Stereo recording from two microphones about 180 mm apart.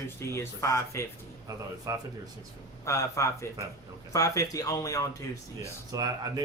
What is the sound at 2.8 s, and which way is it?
A man's voice, 15° left (ahead or behind).